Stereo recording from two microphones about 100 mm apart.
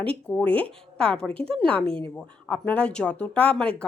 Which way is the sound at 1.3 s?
70° right (ahead or behind).